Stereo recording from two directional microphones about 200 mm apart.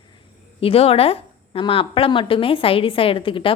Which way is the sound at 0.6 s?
30° left (ahead or behind).